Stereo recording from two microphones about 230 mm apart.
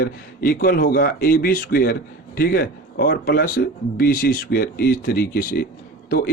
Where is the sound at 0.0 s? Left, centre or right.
Left.